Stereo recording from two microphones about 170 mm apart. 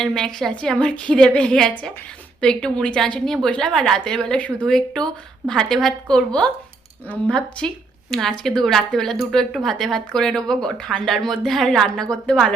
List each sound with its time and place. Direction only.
0.0 s a woman's voice: 5° left (ahead or behind)